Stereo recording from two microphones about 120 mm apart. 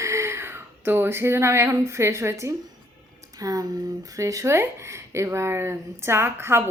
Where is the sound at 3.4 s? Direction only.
30° right (ahead or behind).